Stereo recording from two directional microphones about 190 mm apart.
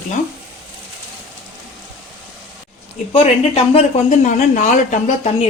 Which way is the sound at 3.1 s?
30° left (ahead or behind).